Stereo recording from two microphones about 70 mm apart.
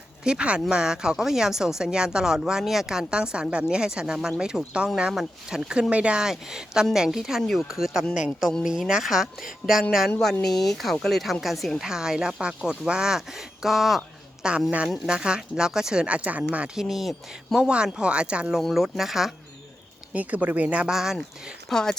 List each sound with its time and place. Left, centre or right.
0.3 s speech: centre
16.9 s speech: centre
18.6 s speech: centre
20.1 s speech: right
20.9 s speech: centre
21.7 s speech: centre